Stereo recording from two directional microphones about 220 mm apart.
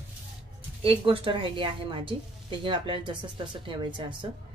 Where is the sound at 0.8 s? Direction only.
25° right (ahead or behind).